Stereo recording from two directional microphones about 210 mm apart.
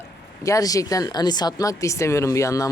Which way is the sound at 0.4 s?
15° left (ahead or behind).